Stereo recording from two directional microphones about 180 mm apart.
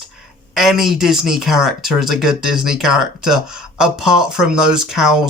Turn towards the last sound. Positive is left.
turn(degrees=-5)  # may be behind; listen again after turning